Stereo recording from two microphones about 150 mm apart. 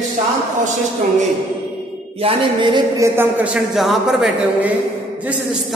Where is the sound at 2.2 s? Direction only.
35° right (ahead or behind).